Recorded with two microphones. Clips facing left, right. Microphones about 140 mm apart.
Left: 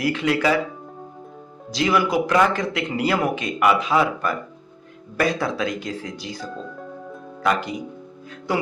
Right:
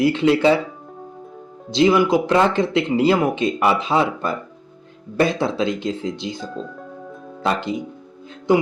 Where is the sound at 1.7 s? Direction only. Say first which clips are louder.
Right 5 dB; 25° right (ahead or behind).